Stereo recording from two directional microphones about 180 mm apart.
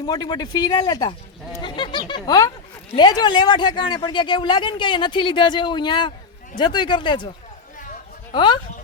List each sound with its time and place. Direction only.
0.0 s speech: 25° left (ahead or behind)
8.3 s speech: 25° left (ahead or behind)